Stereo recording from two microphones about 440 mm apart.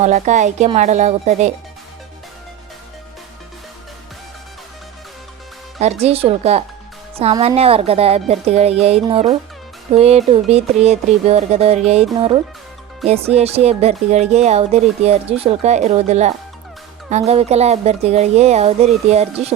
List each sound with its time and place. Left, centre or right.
0.0 s speech: centre
5.8 s speech: centre